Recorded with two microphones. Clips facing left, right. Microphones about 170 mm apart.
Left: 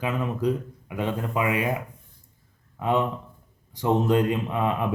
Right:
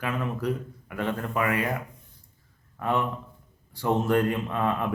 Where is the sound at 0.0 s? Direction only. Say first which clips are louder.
Left 3 dB; 20° left (ahead or behind).